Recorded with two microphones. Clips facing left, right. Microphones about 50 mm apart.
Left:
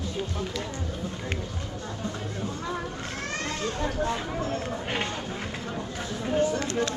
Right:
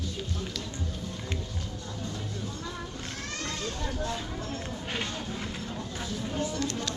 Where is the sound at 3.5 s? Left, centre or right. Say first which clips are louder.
Left 4 dB; left.